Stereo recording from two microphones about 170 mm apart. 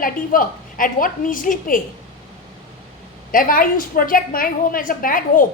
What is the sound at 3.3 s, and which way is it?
A woman's voice, 55° left (ahead or behind).